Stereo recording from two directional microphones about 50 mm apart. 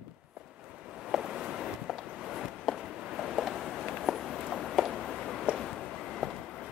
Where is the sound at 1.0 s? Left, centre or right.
Centre.